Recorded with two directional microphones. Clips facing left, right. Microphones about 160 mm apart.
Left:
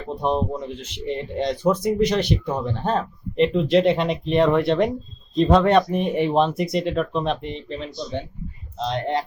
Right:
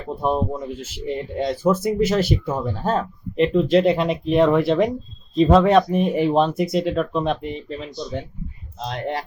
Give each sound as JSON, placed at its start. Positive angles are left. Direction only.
{"t": 0.2, "sound": "speech", "side_deg": -5}